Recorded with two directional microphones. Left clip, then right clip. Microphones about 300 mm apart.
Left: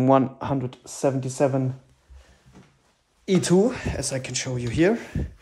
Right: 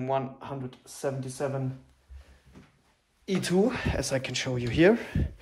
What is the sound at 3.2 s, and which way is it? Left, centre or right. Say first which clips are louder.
Speech: left 8 dB; centre.